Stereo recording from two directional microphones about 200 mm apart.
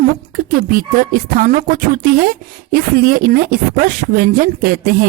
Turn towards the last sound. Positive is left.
turn(degrees=-50)  # may be behind; listen again after turning